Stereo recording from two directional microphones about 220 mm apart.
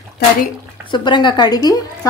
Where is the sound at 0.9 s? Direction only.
20° left (ahead or behind).